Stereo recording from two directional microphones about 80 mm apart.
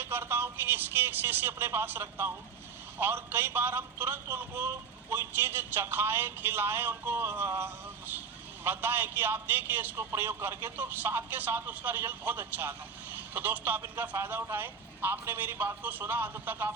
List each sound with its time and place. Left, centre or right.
0.0 s a man's voice: right